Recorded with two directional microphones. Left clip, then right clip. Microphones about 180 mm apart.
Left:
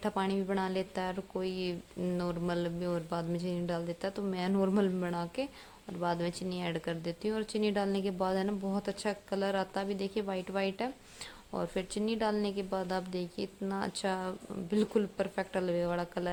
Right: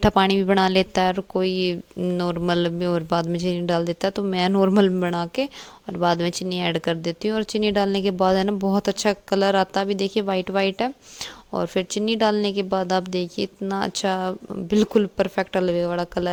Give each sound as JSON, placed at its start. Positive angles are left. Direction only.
{"t": 0.0, "sound": "speech", "side_deg": -45}